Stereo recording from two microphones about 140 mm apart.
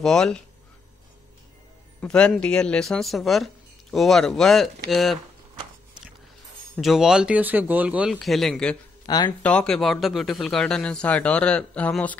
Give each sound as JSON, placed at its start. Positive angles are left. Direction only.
{"t": 0.0, "sound": "speech", "side_deg": 5}
{"t": 2.0, "sound": "speech", "side_deg": 5}
{"t": 6.8, "sound": "speech", "side_deg": 0}
{"t": 8.1, "sound": "speech", "side_deg": 0}
{"t": 9.0, "sound": "speech", "side_deg": 30}
{"t": 9.4, "sound": "a man's voice", "side_deg": 10}